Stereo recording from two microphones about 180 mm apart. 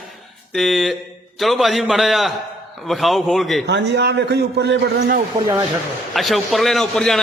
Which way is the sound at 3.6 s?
75° right (ahead or behind).